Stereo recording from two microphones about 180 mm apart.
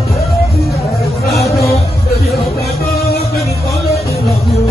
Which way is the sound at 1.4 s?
Centre (ahead or behind).